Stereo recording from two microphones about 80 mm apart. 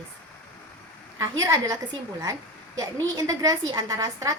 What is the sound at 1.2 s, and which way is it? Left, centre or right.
A woman's voice, right.